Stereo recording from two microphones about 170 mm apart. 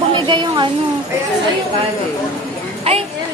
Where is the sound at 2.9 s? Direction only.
35° right (ahead or behind).